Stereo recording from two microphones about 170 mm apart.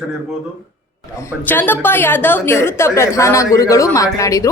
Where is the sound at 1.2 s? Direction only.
15° left (ahead or behind).